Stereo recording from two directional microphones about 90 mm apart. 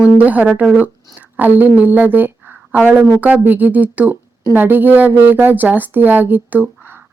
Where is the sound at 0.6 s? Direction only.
15° right (ahead or behind).